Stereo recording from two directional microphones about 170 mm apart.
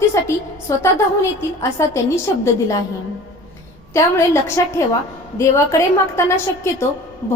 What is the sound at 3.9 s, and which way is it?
A woman's voice, 15° left (ahead or behind).